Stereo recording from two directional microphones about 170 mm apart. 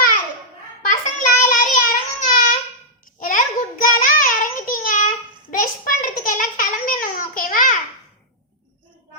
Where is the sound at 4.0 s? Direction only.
55° left (ahead or behind).